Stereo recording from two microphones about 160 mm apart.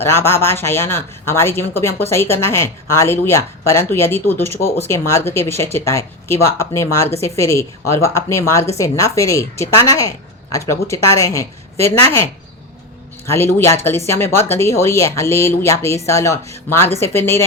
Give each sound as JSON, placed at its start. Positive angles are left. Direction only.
{"t": 0.0, "sound": "a woman's voice", "side_deg": 15}
{"t": 13.3, "sound": "speech", "side_deg": 15}